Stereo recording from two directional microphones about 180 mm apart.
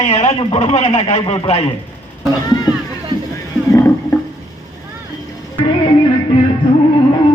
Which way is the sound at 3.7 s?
15° left (ahead or behind).